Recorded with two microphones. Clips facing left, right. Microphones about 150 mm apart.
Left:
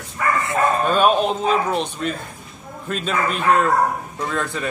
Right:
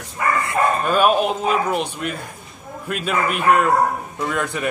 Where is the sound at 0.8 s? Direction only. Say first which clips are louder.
Even; 5° right (ahead or behind).